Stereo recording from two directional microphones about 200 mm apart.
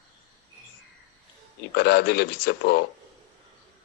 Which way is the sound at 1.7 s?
55° left (ahead or behind).